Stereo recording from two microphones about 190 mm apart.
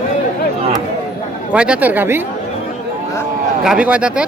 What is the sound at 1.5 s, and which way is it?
Speech, 5° right (ahead or behind).